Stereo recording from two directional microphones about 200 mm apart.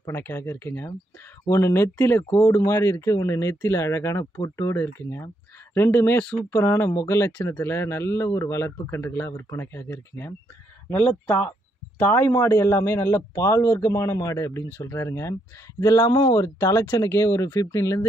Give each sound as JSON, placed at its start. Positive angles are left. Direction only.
{"t": 0.0, "sound": "speech", "side_deg": 10}